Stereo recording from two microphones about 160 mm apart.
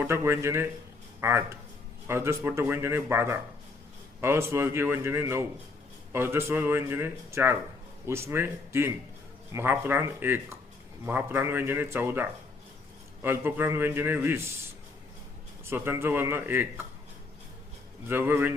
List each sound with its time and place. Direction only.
0.0 s a man's voice: 15° right (ahead or behind)
15.6 s a man's voice: 15° right (ahead or behind)
18.1 s a man's voice: 15° right (ahead or behind)